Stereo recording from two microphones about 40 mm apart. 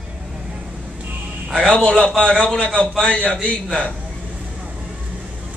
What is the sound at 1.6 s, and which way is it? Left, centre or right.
A man's voice, centre.